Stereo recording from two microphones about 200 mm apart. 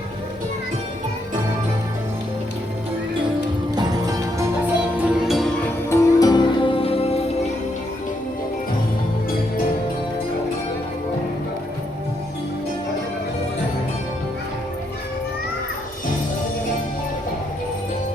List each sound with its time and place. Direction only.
3.8 s music: 15° right (ahead or behind); by 5.7 s centre (ahead or behind)
5.9 s music: 20° left (ahead or behind)